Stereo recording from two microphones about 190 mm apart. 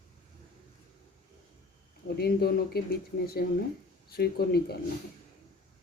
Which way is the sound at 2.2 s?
55° left (ahead or behind).